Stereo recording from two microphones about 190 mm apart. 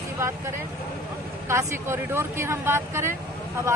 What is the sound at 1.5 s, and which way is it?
Speech, 15° right (ahead or behind).